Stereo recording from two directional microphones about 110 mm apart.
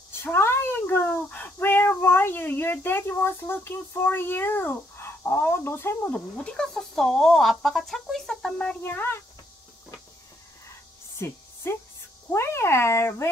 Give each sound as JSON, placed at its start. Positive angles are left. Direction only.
{"t": 0.1, "sound": "a child's voice", "side_deg": 20}
{"t": 8.8, "sound": "a child's voice", "side_deg": 20}
{"t": 11.1, "sound": "a sound", "side_deg": 20}
{"t": 12.3, "sound": "a child's voice", "side_deg": 25}